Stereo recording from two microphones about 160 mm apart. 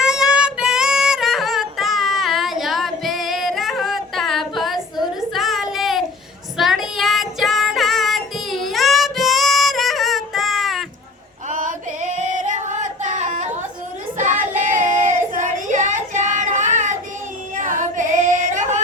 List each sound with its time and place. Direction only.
0.0 s child singing: 5° right (ahead or behind)
11.4 s female singing: 50° right (ahead or behind)
14.2 s child singing: 55° right (ahead or behind)
17.5 s female singing: 55° right (ahead or behind)